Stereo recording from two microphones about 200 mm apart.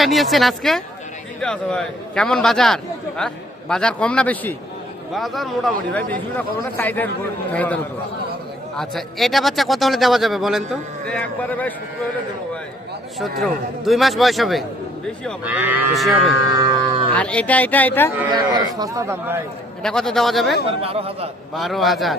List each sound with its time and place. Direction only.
0.0 s a man's voice: centre (ahead or behind)
13.4 s a man's voice: centre (ahead or behind)
16.5 s a sound: 20° right (ahead or behind)
17.2 s speech: 5° left (ahead or behind)
18.3 s a man's voice: 20° right (ahead or behind)
19.8 s a man's voice: 5° left (ahead or behind)
20.7 s speech: 30° right (ahead or behind)
21.5 s a man's voice: centre (ahead or behind)